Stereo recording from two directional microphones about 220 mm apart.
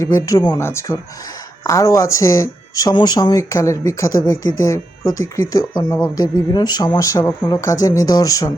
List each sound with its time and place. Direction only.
0.0 s speech: 15° left (ahead or behind)